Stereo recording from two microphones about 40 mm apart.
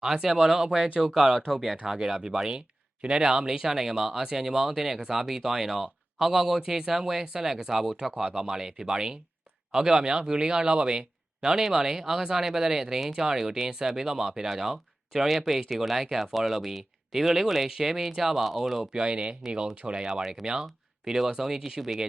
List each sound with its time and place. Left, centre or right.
0.0 s speech: centre
18.9 s speech: right